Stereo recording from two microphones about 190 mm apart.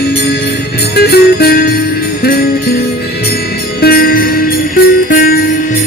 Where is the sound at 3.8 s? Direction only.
55° left (ahead or behind).